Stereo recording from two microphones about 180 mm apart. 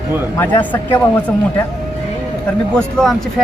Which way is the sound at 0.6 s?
10° left (ahead or behind).